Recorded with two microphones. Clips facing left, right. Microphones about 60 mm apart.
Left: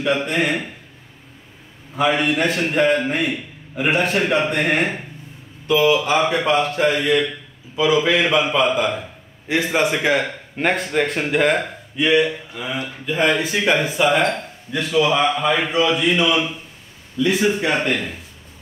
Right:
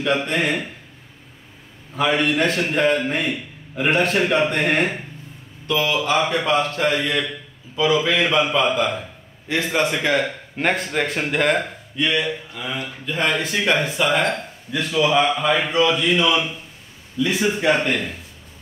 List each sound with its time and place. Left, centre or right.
0.0 s a man's voice: centre
2.0 s a man's voice: centre